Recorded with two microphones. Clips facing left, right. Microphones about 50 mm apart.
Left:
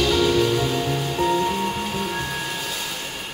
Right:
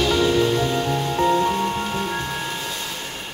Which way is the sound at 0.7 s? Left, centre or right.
Centre.